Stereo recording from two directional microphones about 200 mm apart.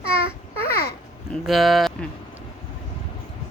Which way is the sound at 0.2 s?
50° left (ahead or behind).